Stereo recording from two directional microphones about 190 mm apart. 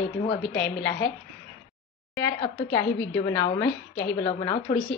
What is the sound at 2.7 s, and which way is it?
Speech, 10° left (ahead or behind).